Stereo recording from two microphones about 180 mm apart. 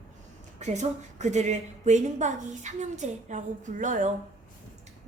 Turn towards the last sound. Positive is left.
turn(degrees=-45)  # may be behind; listen again after turning